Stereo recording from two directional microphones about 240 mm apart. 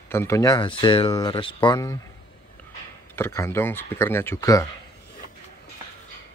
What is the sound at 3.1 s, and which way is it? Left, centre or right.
Speech, centre.